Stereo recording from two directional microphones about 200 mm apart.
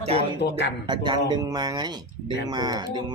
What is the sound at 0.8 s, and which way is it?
Speech, 20° right (ahead or behind).